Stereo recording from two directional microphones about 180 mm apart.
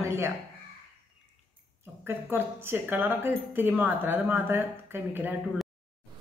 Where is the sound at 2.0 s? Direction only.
10° right (ahead or behind).